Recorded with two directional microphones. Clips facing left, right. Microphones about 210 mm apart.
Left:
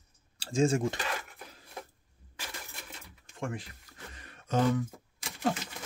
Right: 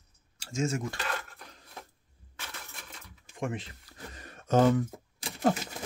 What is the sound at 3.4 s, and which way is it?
Speech, 20° right (ahead or behind).